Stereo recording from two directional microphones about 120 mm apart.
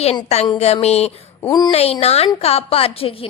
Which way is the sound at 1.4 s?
35° left (ahead or behind).